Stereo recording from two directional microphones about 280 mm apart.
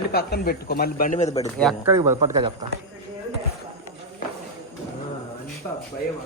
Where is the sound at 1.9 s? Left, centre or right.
Centre.